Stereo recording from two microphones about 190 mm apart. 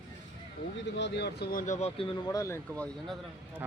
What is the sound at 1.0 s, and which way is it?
Speech, 65° left (ahead or behind).